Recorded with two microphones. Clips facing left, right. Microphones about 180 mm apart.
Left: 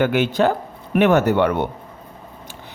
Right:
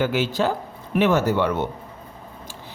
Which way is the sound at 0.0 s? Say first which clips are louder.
Left 4 dB; 60° left (ahead or behind).